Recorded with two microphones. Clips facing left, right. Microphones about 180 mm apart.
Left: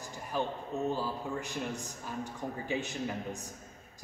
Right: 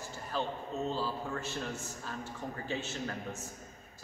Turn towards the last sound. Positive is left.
turn(degrees=15)  # may be behind; listen again after turning